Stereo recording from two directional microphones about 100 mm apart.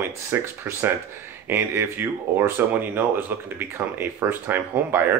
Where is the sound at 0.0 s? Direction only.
25° right (ahead or behind).